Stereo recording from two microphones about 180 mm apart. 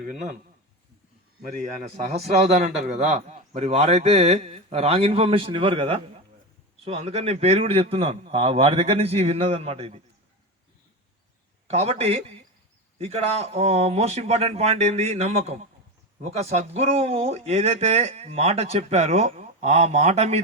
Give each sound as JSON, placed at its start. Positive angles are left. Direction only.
{"t": 1.8, "sound": "speech", "side_deg": -40}
{"t": 11.7, "sound": "speech", "side_deg": -35}